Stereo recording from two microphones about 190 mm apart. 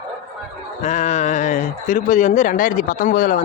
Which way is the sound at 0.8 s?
40° left (ahead or behind).